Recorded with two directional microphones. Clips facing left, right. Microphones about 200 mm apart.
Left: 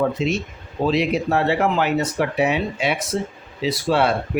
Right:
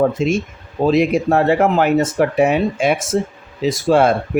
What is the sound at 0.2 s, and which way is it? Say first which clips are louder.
Speech: right 5 dB; 50° right (ahead or behind).